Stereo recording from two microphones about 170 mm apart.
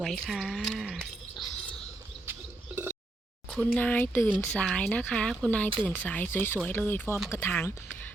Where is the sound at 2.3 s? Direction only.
10° right (ahead or behind).